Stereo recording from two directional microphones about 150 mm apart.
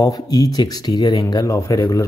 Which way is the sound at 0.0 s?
25° left (ahead or behind).